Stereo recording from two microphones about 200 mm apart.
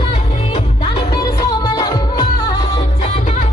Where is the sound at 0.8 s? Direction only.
20° left (ahead or behind).